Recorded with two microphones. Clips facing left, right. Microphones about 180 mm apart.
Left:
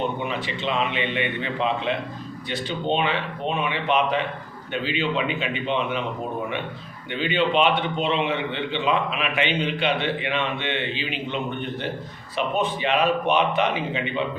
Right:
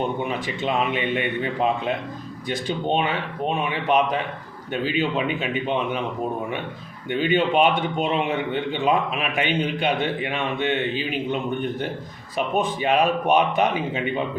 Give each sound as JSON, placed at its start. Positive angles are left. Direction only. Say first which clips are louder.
{"t": 0.3, "sound": "a man's voice", "louder": "right 2 dB", "side_deg": -45}
{"t": 7.1, "sound": "a man's voice", "louder": "right 2 dB", "side_deg": -45}
{"t": 12.5, "sound": "a man's voice", "louder": "right 3 dB", "side_deg": -45}